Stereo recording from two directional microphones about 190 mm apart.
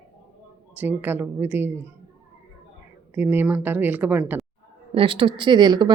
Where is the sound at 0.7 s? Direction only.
10° right (ahead or behind).